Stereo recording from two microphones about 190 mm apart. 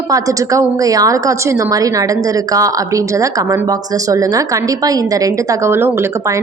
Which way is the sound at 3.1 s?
15° right (ahead or behind).